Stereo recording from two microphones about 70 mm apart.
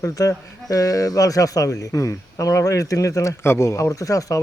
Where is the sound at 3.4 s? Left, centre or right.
Left.